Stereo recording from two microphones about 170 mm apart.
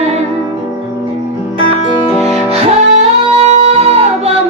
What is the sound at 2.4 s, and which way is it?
Music, 35° right (ahead or behind).